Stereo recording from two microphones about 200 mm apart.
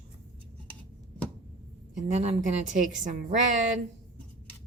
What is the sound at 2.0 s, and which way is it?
Speech, 35° right (ahead or behind).